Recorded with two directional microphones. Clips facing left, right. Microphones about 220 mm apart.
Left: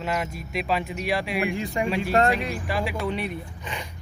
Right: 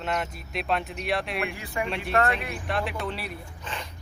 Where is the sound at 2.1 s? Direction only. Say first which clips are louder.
Left 2 dB; 35° left (ahead or behind).